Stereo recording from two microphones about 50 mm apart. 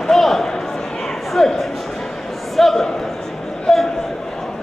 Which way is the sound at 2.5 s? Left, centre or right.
Centre.